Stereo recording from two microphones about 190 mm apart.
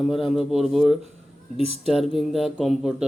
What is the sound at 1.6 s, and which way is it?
Speech, 35° right (ahead or behind).